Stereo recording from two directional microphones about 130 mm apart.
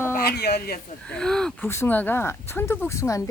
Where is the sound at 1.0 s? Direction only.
5° left (ahead or behind).